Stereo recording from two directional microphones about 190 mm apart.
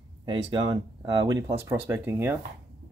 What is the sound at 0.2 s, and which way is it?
Speech, 25° right (ahead or behind).